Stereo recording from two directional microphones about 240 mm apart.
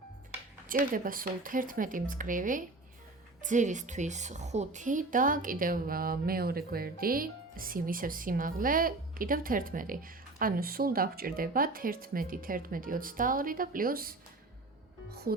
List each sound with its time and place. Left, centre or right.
0.7 s a woman's voice: right